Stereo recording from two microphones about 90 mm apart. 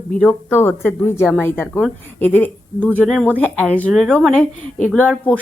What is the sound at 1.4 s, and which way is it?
Speech, 25° left (ahead or behind).